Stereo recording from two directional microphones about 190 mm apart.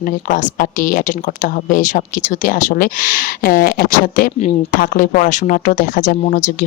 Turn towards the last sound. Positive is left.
turn(degrees=45)  # may be behind; listen again after turning